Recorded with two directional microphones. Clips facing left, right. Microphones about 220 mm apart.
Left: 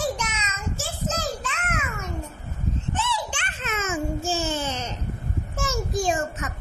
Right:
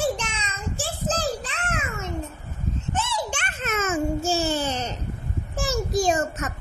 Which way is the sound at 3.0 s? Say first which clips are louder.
Right 1 dB; 45° right (ahead or behind).